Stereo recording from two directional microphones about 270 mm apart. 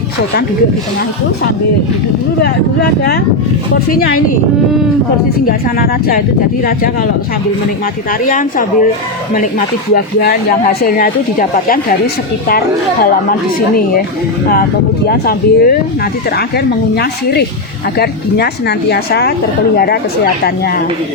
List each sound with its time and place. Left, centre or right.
3.9 s speech: left
5.5 s speech: left
8.3 s speech: left
9.9 s speech: left
15.0 s speech: left
16.9 s speech: left